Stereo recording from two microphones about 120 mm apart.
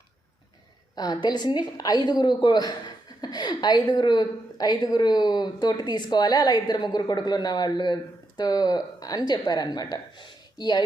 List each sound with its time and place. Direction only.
0.9 s a woman's voice: 35° left (ahead or behind)